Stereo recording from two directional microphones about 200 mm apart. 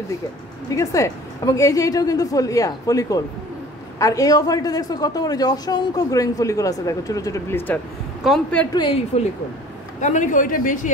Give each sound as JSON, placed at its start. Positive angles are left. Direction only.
{"t": 0.7, "sound": "a woman's voice", "side_deg": 15}
{"t": 8.7, "sound": "a woman's voice", "side_deg": 25}
{"t": 9.9, "sound": "a man's voice", "side_deg": 40}